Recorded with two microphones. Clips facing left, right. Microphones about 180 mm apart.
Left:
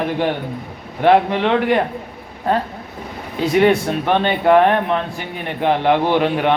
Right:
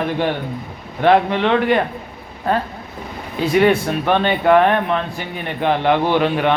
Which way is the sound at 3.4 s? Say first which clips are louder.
Even; 25° left (ahead or behind).